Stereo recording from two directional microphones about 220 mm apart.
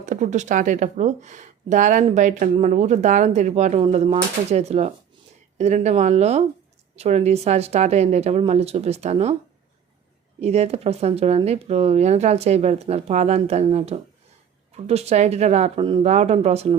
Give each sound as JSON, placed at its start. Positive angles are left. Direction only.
{"t": 0.0, "sound": "speech", "side_deg": -35}
{"t": 10.4, "sound": "speech", "side_deg": -30}